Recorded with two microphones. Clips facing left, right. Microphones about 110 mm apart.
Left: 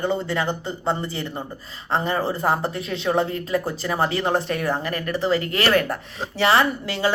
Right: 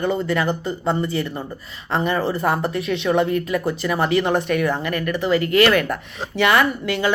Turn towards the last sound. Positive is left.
turn(degrees=30)  # may be behind; listen again after turning